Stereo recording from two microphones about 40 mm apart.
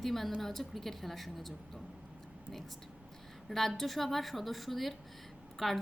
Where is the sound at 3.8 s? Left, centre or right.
Centre.